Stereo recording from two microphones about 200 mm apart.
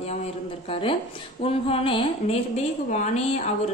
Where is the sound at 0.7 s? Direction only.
25° left (ahead or behind).